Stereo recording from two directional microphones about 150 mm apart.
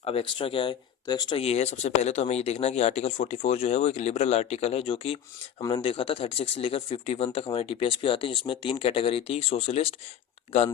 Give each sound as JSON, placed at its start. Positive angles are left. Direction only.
{"t": 0.0, "sound": "speech", "side_deg": 40}
{"t": 1.4, "sound": "speech", "side_deg": 45}